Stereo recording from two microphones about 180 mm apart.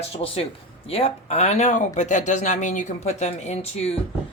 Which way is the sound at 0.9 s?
35° left (ahead or behind).